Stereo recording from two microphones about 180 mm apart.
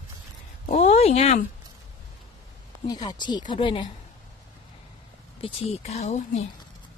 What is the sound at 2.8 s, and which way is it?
Speech, 20° left (ahead or behind).